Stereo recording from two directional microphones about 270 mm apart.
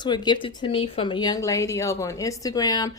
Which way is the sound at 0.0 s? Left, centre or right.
Centre.